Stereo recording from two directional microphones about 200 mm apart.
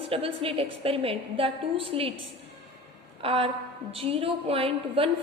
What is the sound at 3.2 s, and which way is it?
A woman's voice, 25° right (ahead or behind).